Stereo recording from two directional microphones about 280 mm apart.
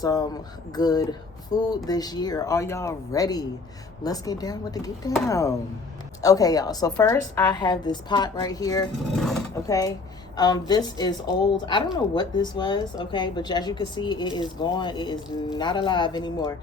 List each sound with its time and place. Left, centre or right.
0.0 s a woman's voice: centre